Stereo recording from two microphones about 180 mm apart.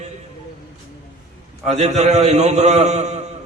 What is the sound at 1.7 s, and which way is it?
A man's voice, 40° right (ahead or behind).